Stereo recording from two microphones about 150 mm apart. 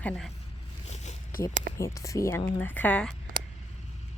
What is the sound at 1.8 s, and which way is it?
Speech, 20° left (ahead or behind).